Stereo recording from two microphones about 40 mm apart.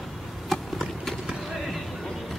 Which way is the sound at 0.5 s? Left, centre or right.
Centre.